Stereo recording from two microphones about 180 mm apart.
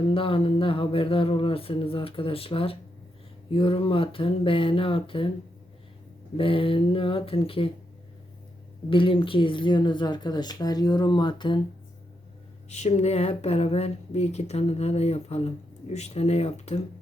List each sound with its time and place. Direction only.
0.1 s speech: 30° left (ahead or behind)
6.3 s speech: 30° left (ahead or behind)
8.9 s speech: 30° left (ahead or behind)
12.6 s speech: 40° left (ahead or behind)